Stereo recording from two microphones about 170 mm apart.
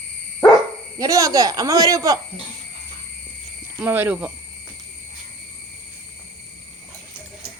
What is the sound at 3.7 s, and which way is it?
Speech, 10° right (ahead or behind).